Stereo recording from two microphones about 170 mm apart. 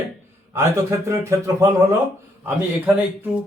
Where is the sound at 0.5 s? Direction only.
15° right (ahead or behind).